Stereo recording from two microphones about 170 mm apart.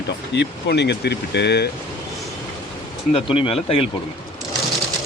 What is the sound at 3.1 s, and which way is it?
Speech, 30° left (ahead or behind).